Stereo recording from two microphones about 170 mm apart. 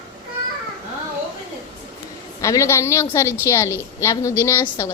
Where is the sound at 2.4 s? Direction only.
15° left (ahead or behind).